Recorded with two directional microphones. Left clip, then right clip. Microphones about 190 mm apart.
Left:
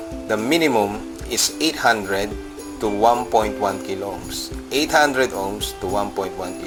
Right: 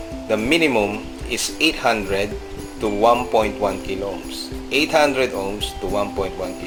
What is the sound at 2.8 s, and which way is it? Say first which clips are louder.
Speech: right 1 dB; 25° left (ahead or behind).